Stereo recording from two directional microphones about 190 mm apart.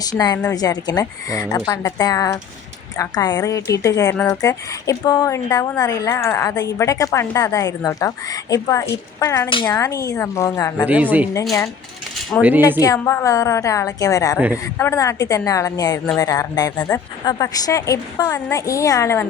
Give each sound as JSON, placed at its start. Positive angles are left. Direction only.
{"t": 0.0, "sound": "a woman's voice", "side_deg": 20}
{"t": 9.5, "sound": "a woman's voice", "side_deg": 25}
{"t": 10.8, "sound": "speech", "side_deg": -10}
{"t": 12.4, "sound": "speech", "side_deg": -10}
{"t": 12.8, "sound": "a woman's voice", "side_deg": 15}
{"t": 14.3, "sound": "speech", "side_deg": -10}
{"t": 14.6, "sound": "a woman's voice", "side_deg": 15}